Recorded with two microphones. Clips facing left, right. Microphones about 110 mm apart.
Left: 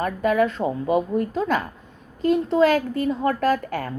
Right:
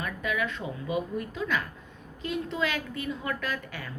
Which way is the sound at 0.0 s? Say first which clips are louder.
Left 11 dB; 45° left (ahead or behind).